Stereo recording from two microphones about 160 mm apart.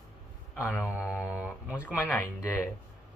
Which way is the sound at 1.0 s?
5° right (ahead or behind).